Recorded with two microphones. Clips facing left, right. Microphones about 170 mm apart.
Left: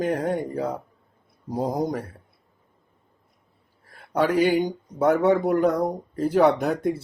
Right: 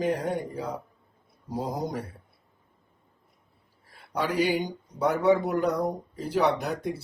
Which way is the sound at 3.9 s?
50° left (ahead or behind).